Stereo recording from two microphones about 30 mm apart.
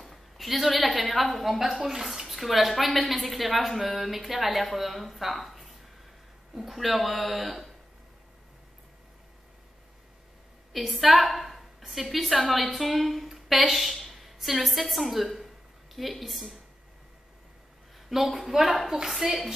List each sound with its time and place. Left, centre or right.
0.0 s a sound: centre
1.1 s a woman's voice: centre
1.8 s speech: centre
2.1 s a woman's voice: centre
10.9 s a woman's voice: centre
17.9 s a sound: centre
18.5 s a woman's voice: centre